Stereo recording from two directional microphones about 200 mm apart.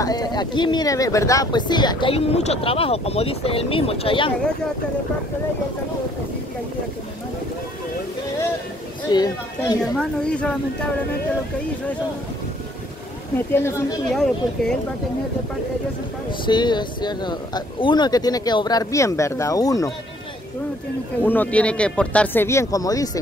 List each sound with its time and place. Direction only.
0.0 s speech: 20° left (ahead or behind)
9.1 s speech: 20° left (ahead or behind)
9.9 s speech: 5° left (ahead or behind)
13.5 s speech: 10° left (ahead or behind)
14.1 s speech: centre (ahead or behind)
16.4 s speech: 20° left (ahead or behind)
21.2 s speech: 10° left (ahead or behind)